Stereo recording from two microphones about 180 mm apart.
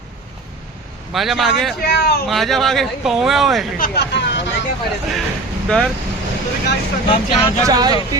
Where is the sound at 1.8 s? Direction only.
60° left (ahead or behind).